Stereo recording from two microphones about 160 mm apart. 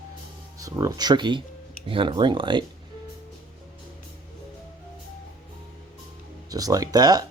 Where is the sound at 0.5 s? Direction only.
20° right (ahead or behind).